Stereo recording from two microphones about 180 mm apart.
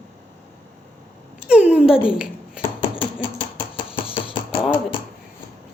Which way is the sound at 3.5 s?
30° left (ahead or behind).